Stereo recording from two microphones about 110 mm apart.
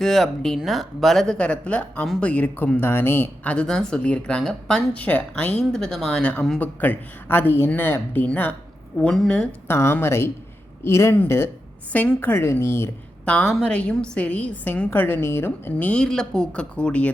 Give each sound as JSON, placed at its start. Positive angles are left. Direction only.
{"t": 0.0, "sound": "speech", "side_deg": 5}
{"t": 9.6, "sound": "a woman's voice", "side_deg": 25}
{"t": 13.3, "sound": "speech", "side_deg": 5}